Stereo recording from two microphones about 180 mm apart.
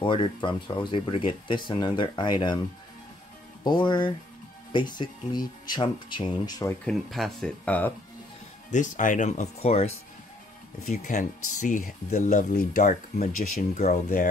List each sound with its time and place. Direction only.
0.0 s speech: 25° left (ahead or behind)
3.6 s speech: 25° left (ahead or behind)
6.9 s speech: centre (ahead or behind)
8.6 s speech: 45° left (ahead or behind)
10.9 s speech: 45° left (ahead or behind)